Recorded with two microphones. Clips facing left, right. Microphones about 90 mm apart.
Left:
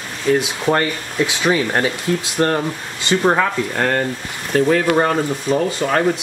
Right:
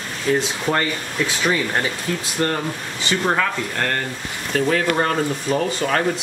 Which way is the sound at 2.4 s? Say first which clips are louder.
Left 4 dB; 40° left (ahead or behind).